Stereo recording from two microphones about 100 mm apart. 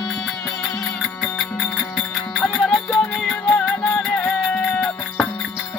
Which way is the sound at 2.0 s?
5° left (ahead or behind).